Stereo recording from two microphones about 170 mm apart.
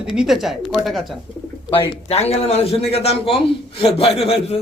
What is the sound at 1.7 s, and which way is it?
A man's voice, 35° left (ahead or behind).